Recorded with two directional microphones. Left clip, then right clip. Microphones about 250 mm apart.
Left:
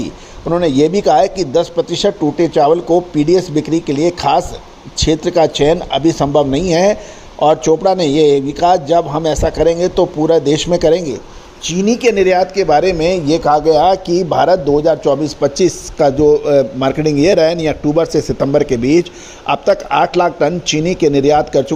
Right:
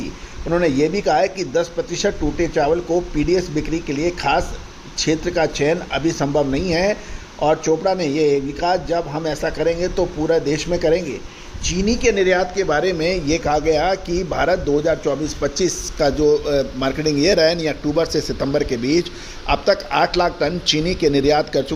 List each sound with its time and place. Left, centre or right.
0.5 s speech: left